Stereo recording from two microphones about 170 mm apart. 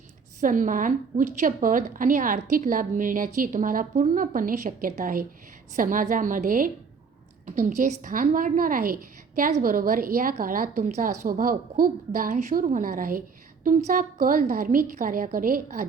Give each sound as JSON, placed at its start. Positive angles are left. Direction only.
{"t": 0.3, "sound": "a woman's voice", "side_deg": -50}